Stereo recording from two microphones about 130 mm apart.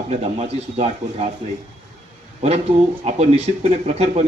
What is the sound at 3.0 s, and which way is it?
Speech, 55° right (ahead or behind).